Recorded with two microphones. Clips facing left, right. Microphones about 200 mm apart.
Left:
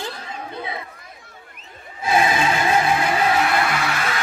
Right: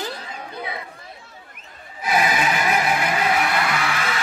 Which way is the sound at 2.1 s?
25° left (ahead or behind).